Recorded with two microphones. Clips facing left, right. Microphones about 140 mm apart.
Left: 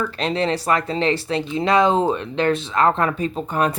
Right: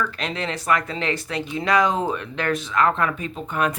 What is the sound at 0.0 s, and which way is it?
Speech, 30° left (ahead or behind).